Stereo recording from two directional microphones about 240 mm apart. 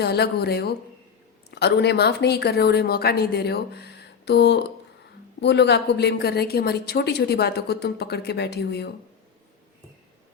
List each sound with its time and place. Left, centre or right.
0.0 s a woman's voice: left